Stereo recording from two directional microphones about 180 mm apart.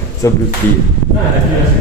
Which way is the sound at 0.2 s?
15° left (ahead or behind).